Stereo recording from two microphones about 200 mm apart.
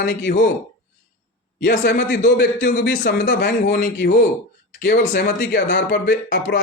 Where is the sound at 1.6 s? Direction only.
50° left (ahead or behind).